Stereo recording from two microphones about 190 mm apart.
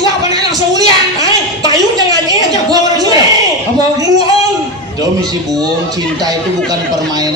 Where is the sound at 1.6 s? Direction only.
20° right (ahead or behind).